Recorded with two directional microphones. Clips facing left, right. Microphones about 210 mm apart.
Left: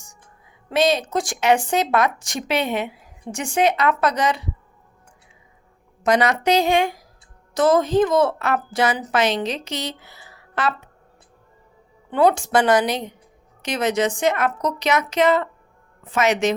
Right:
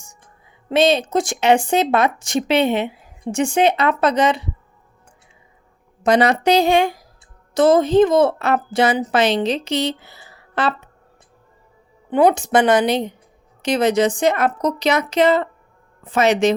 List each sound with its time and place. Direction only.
0.7 s speech: 25° right (ahead or behind)
6.0 s a woman's voice: 30° right (ahead or behind)
12.1 s a woman's voice: 20° right (ahead or behind)